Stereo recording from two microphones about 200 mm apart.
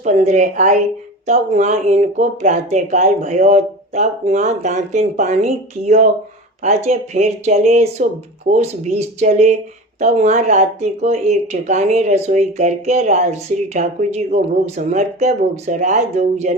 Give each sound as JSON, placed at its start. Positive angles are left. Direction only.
{"t": 0.0, "sound": "speech", "side_deg": -35}